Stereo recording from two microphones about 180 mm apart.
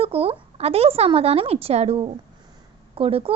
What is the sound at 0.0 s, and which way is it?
A child's voice, 30° right (ahead or behind).